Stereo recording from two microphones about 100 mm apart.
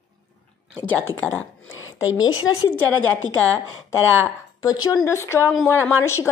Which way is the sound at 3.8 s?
25° left (ahead or behind).